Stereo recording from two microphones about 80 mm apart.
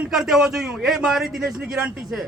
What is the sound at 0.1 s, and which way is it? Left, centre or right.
A man's voice, centre.